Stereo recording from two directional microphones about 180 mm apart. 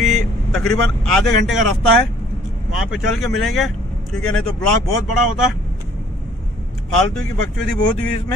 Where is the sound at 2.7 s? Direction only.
Centre (ahead or behind).